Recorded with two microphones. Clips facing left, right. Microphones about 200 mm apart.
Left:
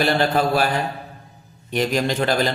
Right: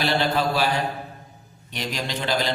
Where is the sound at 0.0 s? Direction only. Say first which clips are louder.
Left 4 dB; 50° left (ahead or behind).